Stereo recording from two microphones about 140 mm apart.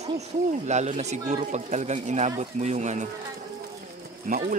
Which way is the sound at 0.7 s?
55° right (ahead or behind).